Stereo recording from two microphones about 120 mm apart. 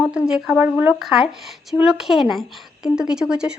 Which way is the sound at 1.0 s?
Centre (ahead or behind).